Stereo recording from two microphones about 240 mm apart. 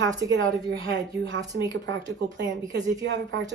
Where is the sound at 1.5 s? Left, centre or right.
Right.